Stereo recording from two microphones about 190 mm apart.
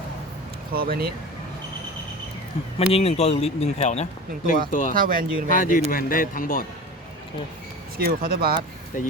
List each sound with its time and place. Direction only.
0.7 s speech: 50° right (ahead or behind)
2.7 s speech: 30° left (ahead or behind)
4.9 s speech: 45° right (ahead or behind)
5.5 s speech: 45° left (ahead or behind)
7.9 s speech: 50° right (ahead or behind)
8.9 s speech: 45° left (ahead or behind)